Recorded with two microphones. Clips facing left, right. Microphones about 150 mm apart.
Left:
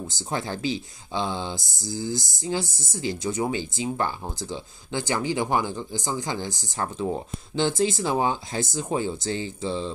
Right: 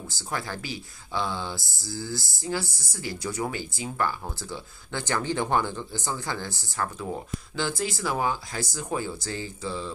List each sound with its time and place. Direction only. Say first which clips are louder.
0.1 s speech: left 2 dB; 20° left (ahead or behind)